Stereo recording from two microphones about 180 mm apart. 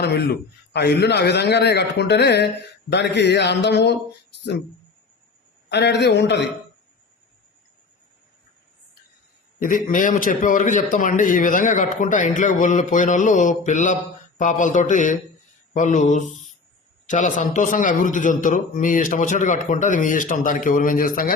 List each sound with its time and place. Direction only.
0.0 s a man's voice: 60° left (ahead or behind)
5.6 s a man's voice: 75° left (ahead or behind)
9.6 s a man's voice: 50° left (ahead or behind)